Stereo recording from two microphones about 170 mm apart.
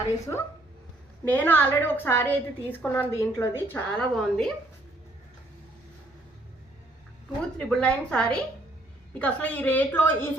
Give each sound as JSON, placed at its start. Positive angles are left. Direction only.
{"t": 0.3, "sound": "a woman's voice", "side_deg": 20}
{"t": 7.7, "sound": "a woman's voice", "side_deg": 5}